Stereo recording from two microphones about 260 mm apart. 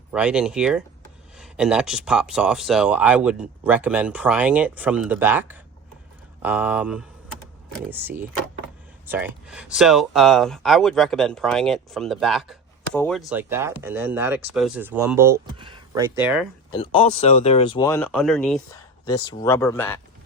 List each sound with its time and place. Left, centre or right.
0.1 s speech: centre
16.7 s speech: left; by 18.6 s centre
19.0 s speech: centre